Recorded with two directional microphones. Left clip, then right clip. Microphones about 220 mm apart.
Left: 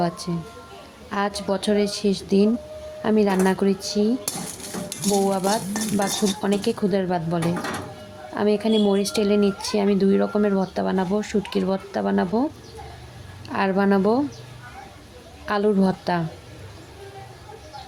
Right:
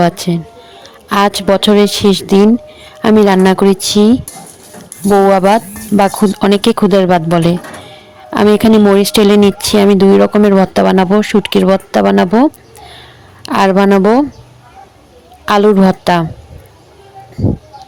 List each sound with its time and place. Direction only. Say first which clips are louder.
0.0 s speech: right 13 dB; 40° right (ahead or behind)
5.3 s speech: right 14 dB; 40° right (ahead or behind)
8.5 s speech: right 13 dB; 40° right (ahead or behind)
15.4 s speech: right 13 dB; 40° right (ahead or behind)